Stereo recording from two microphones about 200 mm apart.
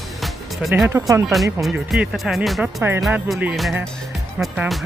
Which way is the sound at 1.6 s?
5° right (ahead or behind).